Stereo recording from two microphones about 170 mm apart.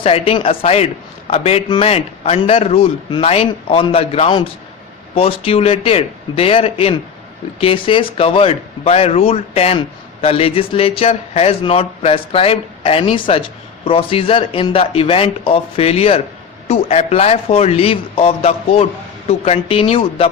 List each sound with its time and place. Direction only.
0.0 s speech: 35° left (ahead or behind)